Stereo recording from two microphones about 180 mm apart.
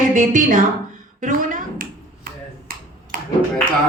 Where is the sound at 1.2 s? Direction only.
45° right (ahead or behind).